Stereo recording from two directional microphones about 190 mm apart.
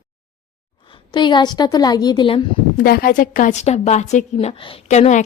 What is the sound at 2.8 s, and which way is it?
A woman's voice, 50° left (ahead or behind).